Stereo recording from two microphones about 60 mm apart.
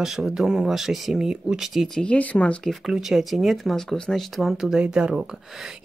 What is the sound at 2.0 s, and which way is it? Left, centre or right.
Speech, left.